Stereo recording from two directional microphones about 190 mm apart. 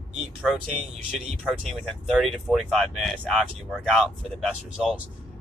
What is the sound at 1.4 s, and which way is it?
Speech, centre (ahead or behind).